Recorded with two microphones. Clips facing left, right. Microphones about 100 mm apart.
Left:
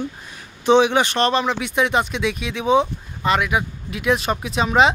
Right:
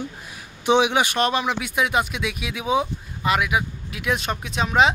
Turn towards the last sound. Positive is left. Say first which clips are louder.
# left 3 dB
turn(degrees=0)  # may be behind; listen again after turning